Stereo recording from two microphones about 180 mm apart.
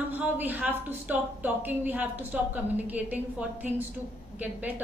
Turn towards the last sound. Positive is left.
turn(degrees=-10)  # may be behind; listen again after turning